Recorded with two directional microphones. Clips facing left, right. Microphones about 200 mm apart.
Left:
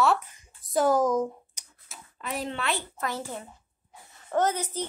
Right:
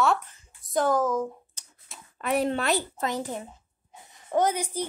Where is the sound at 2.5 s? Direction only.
40° right (ahead or behind).